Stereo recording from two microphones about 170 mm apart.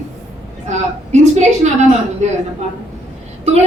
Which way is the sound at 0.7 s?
45° right (ahead or behind).